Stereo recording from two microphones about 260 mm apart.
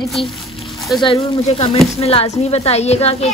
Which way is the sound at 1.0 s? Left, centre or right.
Left.